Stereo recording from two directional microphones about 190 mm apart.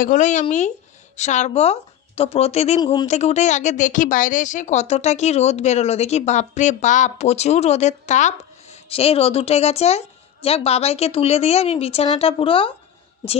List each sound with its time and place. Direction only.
0.0 s speech: 40° left (ahead or behind)
2.8 s speech: 25° left (ahead or behind)
3.1 s a woman's voice: 35° left (ahead or behind)